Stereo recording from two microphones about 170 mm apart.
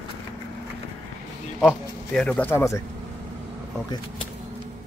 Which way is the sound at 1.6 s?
5° left (ahead or behind).